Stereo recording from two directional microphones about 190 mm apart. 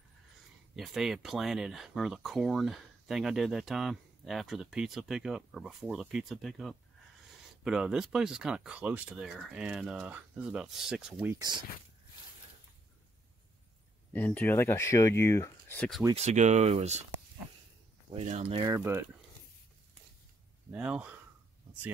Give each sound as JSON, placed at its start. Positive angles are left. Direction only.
{"t": 0.7, "sound": "speech", "side_deg": 0}
{"t": 14.1, "sound": "speech", "side_deg": 10}
{"t": 16.2, "sound": "speech", "side_deg": -40}
{"t": 18.1, "sound": "speech", "side_deg": -35}
{"t": 18.7, "sound": "speech", "side_deg": -10}
{"t": 20.7, "sound": "speech", "side_deg": -5}